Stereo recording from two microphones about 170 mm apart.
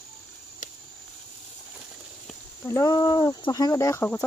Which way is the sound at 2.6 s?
20° left (ahead or behind).